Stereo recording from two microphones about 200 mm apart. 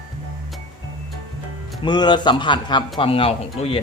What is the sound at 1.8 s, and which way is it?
A man's voice, 20° left (ahead or behind).